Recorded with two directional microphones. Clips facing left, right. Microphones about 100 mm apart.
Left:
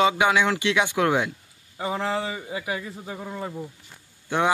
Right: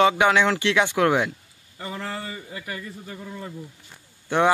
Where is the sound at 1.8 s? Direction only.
90° left.